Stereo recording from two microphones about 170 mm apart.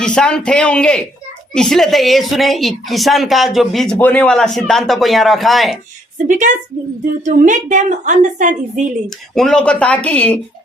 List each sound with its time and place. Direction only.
0.0 s a woman's voice: 5° left (ahead or behind)
6.2 s a woman's voice: 50° right (ahead or behind)
9.0 s speech: centre (ahead or behind)